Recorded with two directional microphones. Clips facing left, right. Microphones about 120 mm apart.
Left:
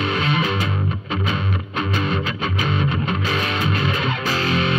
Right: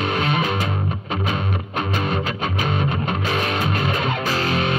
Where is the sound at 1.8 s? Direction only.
45° right (ahead or behind).